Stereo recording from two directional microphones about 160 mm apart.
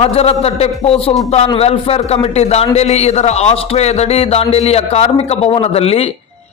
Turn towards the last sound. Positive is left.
turn(degrees=40)  # may be behind; listen again after turning